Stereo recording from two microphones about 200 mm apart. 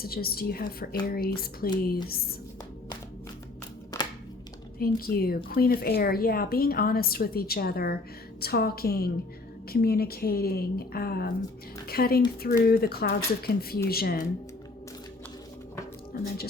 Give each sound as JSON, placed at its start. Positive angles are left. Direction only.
{"t": 0.0, "sound": "a woman's voice", "side_deg": 50}
{"t": 3.9, "sound": "a sound", "side_deg": 20}
{"t": 4.8, "sound": "a woman's voice", "side_deg": 50}
{"t": 16.1, "sound": "a woman's voice", "side_deg": 50}